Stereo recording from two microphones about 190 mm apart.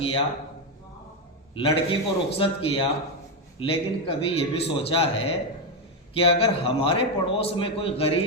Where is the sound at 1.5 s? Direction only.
30° left (ahead or behind).